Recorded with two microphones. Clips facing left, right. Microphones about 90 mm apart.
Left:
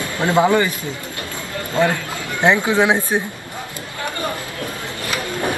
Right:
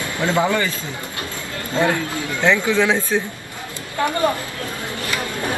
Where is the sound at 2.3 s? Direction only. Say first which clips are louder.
Left 2 dB; 15° left (ahead or behind).